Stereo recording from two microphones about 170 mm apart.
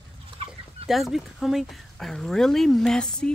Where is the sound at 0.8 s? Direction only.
Centre (ahead or behind).